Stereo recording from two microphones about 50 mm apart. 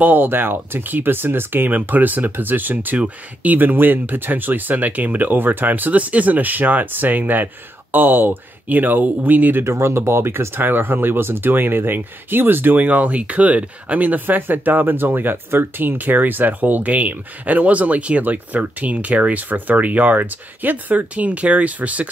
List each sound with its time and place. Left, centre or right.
0.0 s speech: right
9.7 s speech: right